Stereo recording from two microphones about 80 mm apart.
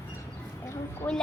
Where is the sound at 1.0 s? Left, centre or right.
Left.